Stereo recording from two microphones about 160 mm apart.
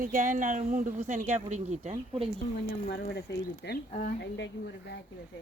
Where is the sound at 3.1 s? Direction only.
90° left.